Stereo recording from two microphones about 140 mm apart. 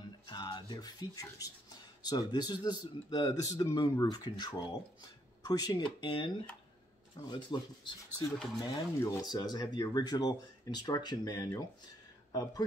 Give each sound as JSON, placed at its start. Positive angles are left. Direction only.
{"t": 0.3, "sound": "speech", "side_deg": 30}